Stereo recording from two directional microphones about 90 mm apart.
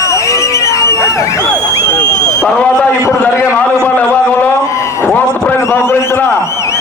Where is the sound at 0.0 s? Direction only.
35° left (ahead or behind).